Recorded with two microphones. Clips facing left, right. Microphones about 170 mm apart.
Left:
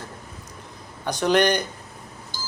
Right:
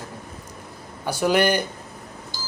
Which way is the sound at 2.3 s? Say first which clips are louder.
Left 3 dB; 50° left (ahead or behind).